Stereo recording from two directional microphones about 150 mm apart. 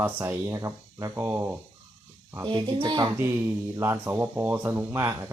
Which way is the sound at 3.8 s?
15° right (ahead or behind).